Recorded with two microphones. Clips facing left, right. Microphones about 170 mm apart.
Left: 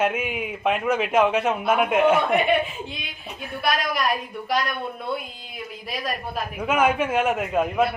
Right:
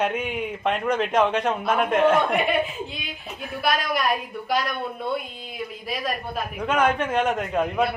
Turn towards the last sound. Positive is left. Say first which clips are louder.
# left 1 dB
turn(degrees=0)  # may be behind; listen again after turning